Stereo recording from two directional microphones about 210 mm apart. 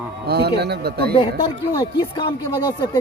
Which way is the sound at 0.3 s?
50° right (ahead or behind).